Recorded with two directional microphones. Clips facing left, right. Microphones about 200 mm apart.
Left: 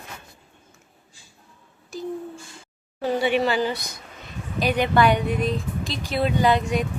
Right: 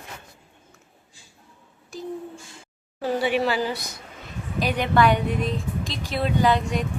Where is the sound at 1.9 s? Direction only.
Centre (ahead or behind).